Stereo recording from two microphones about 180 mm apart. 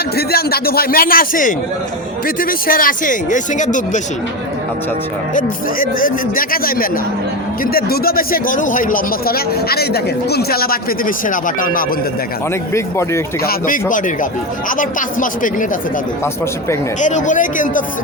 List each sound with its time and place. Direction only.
0.2 s speech: 60° left (ahead or behind); by 4.0 s 45° left (ahead or behind)
5.3 s speech: 50° left (ahead or behind)
12.7 s speech: 15° left (ahead or behind)
13.4 s speech: 55° left (ahead or behind)
17.0 s speech: 40° left (ahead or behind)